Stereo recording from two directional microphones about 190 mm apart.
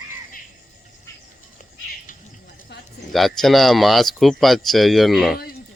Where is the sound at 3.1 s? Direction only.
Centre (ahead or behind).